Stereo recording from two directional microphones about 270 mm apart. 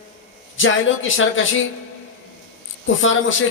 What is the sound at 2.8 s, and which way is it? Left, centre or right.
Speech, left.